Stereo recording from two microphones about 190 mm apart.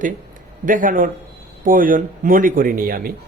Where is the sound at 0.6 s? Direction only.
45° right (ahead or behind).